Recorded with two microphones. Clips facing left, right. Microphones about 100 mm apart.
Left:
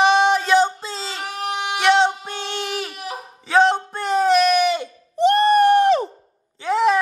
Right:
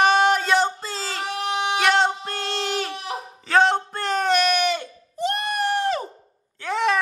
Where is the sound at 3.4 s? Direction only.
Centre (ahead or behind).